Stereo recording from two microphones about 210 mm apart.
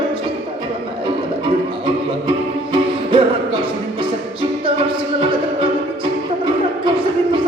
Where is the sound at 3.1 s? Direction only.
25° right (ahead or behind).